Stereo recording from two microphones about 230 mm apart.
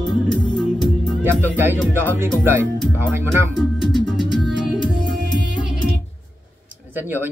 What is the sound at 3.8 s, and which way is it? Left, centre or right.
Music, centre.